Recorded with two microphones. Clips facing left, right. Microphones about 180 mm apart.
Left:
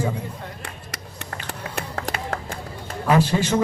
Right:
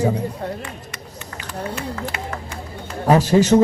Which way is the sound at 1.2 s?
60° left (ahead or behind).